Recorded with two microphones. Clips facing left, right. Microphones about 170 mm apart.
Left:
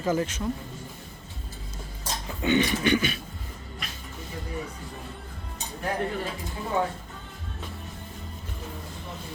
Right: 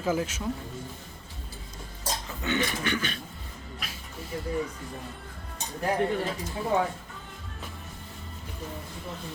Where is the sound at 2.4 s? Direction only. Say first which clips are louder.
Left 6 dB; 15° left (ahead or behind).